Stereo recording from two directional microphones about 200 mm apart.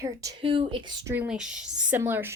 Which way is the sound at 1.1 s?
5° right (ahead or behind).